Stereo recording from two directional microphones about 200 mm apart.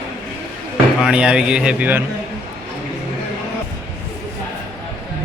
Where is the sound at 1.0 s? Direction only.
5° right (ahead or behind).